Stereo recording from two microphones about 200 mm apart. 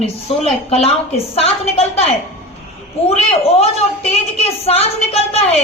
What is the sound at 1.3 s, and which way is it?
A woman's voice, 30° left (ahead or behind).